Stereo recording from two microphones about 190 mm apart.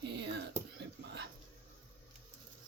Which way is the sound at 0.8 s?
65° right (ahead or behind).